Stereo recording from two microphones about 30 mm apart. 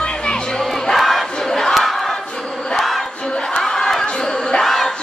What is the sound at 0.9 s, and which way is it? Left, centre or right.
Crowd, centre.